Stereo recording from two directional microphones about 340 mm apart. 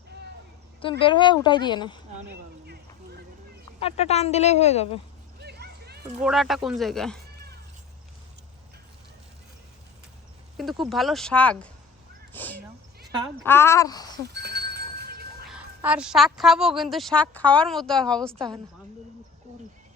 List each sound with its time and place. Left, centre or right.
0.8 s speech: centre
3.8 s speech: centre
5.4 s a sound: right
6.2 s a woman's voice: centre
10.6 s a woman's voice: centre
14.2 s a sound: right
15.4 s a woman's voice: centre